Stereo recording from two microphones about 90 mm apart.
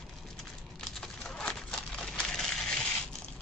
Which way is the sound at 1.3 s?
10° left (ahead or behind).